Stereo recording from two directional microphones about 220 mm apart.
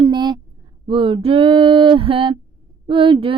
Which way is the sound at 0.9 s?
25° right (ahead or behind).